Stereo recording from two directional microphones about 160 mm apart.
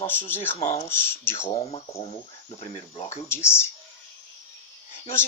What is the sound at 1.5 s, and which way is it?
Speech, 40° left (ahead or behind).